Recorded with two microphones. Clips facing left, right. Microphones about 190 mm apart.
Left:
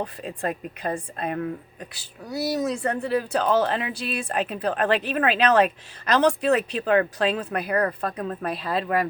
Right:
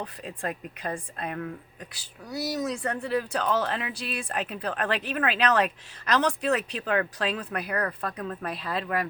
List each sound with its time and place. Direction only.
0.0 s a woman's voice: 40° left (ahead or behind)
1.4 s a woman's voice: 30° left (ahead or behind)